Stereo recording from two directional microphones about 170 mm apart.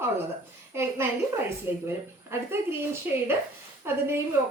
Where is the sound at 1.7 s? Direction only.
10° right (ahead or behind).